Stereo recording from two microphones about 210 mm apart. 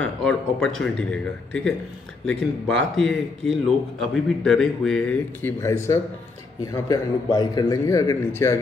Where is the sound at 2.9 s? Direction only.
Centre (ahead or behind).